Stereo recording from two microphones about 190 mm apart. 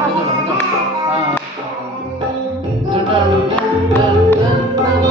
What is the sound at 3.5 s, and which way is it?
Music, 10° left (ahead or behind).